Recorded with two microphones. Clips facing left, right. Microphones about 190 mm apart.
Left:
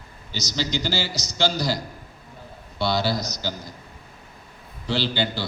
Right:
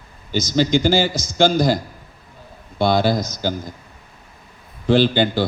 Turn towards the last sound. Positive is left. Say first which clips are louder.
# right 9 dB
turn(degrees=-50)  # may be behind; listen again after turning